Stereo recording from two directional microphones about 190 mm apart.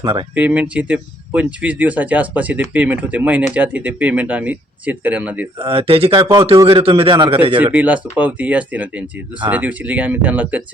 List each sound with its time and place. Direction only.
0.0 s a man's voice: 25° right (ahead or behind)
0.3 s speech: 10° right (ahead or behind)
5.5 s a man's voice: 30° right (ahead or behind)
7.6 s speech: 10° right (ahead or behind)